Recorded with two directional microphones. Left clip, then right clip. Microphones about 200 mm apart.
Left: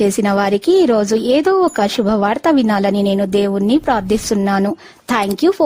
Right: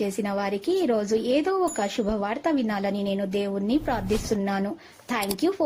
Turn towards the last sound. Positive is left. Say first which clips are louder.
# left 11 dB
turn(degrees=55)  # may be behind; listen again after turning